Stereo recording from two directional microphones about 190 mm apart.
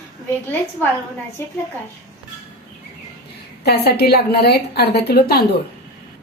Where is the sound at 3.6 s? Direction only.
55° left (ahead or behind).